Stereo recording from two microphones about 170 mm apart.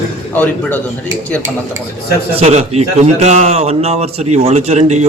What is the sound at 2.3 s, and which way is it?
A man's voice, 40° right (ahead or behind).